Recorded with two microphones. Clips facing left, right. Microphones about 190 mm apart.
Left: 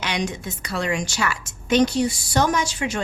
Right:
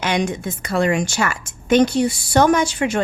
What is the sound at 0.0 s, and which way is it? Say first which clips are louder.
Speech: right 6 dB; 50° right (ahead or behind).